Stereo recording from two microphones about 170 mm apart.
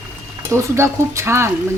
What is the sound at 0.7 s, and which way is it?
Dishes, 15° right (ahead or behind).